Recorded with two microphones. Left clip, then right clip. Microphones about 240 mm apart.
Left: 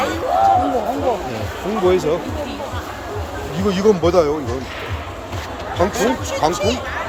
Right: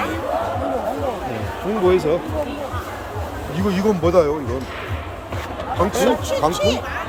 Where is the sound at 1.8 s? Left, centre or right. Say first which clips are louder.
Even; centre.